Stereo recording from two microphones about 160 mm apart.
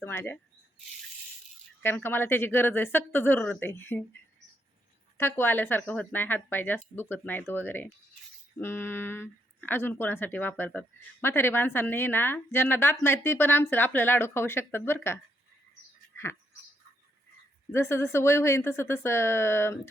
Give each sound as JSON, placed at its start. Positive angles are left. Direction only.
{"t": 0.0, "sound": "speech", "side_deg": 15}
{"t": 1.8, "sound": "a woman's voice", "side_deg": 15}
{"t": 5.1, "sound": "a woman's voice", "side_deg": 15}
{"t": 17.7, "sound": "a woman's voice", "side_deg": 15}